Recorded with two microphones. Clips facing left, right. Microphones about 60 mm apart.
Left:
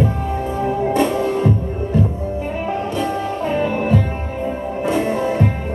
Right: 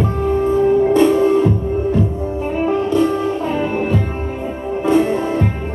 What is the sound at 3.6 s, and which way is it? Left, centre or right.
Music, right.